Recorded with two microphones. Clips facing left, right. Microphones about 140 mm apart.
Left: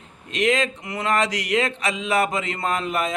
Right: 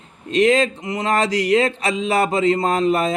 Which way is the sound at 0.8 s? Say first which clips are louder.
Right 5 dB; 20° right (ahead or behind).